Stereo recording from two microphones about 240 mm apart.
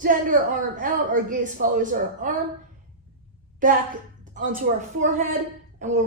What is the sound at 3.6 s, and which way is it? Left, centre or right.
Speech, right.